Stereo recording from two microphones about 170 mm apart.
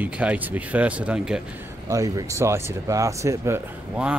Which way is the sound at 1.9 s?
20° right (ahead or behind).